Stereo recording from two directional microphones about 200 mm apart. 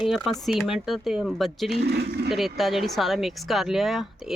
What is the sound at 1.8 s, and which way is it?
Speech, 55° right (ahead or behind).